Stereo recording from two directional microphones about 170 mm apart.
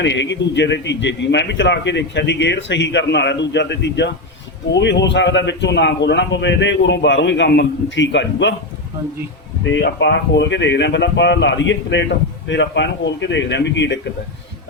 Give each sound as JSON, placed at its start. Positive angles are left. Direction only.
{"t": 0.0, "sound": "speech", "side_deg": 90}
{"t": 9.6, "sound": "speech", "side_deg": 90}